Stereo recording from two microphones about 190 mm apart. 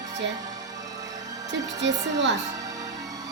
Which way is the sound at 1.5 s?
70° right (ahead or behind).